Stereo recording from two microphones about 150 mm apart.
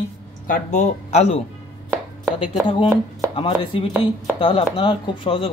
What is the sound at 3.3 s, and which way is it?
Speech, 35° left (ahead or behind).